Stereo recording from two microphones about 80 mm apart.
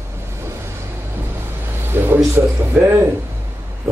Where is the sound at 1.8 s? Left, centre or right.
Right.